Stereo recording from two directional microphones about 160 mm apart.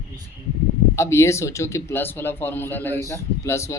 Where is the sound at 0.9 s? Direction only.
15° left (ahead or behind).